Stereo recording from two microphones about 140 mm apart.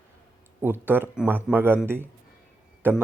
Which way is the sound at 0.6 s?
15° right (ahead or behind).